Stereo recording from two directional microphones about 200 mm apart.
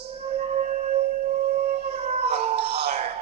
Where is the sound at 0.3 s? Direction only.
35° right (ahead or behind).